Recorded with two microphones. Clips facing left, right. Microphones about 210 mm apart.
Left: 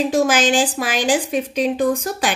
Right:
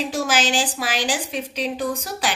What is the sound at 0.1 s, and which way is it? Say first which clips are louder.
A woman's voice: left 6 dB; 50° left (ahead or behind).